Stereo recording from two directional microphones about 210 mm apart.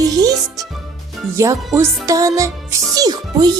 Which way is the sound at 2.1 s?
15° right (ahead or behind).